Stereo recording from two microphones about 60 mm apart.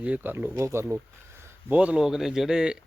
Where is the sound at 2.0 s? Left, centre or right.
Centre.